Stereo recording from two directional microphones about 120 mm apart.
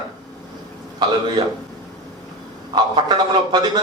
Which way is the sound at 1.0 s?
35° right (ahead or behind).